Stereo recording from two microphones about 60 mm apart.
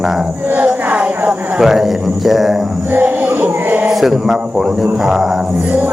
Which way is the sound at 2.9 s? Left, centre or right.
Right.